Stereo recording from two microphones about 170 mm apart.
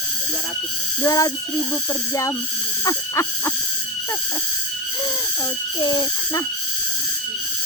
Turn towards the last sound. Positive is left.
turn(degrees=25)  # may be behind; listen again after turning